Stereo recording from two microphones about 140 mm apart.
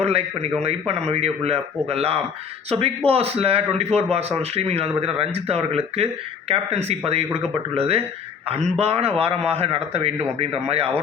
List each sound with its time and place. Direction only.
0.6 s a man's voice: 50° right (ahead or behind)